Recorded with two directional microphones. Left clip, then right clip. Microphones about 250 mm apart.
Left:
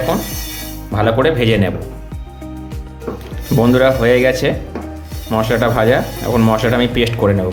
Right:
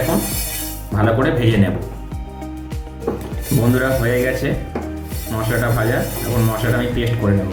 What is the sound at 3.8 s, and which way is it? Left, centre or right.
Speech, left.